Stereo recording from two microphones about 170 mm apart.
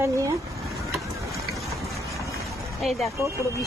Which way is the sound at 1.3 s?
Centre (ahead or behind).